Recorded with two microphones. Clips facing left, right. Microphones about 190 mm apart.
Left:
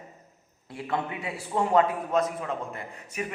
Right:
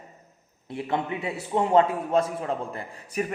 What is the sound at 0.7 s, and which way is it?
A man's voice, 25° right (ahead or behind).